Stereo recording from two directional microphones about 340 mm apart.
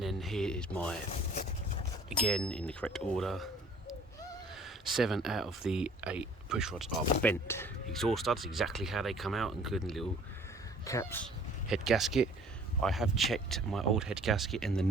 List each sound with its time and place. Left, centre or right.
0.0 s speech: centre
1.1 s vehicle: left
2.0 s speech: centre